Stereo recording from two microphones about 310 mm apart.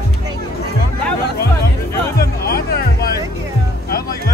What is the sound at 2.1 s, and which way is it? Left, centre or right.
Music, left.